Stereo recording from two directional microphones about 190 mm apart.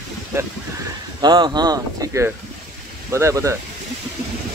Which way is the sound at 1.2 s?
25° right (ahead or behind).